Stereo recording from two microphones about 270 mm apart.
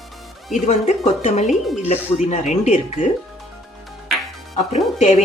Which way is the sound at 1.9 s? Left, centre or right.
Left.